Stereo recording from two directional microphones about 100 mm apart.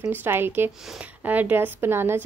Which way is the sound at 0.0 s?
20° right (ahead or behind).